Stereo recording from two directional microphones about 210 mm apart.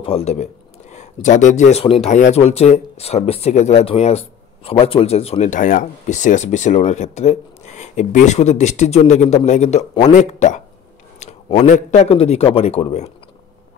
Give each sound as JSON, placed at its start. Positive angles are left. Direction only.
{"t": 0.0, "sound": "speech", "side_deg": 30}